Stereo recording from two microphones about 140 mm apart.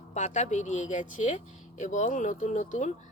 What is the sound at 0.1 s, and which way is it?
A woman's voice, 55° left (ahead or behind).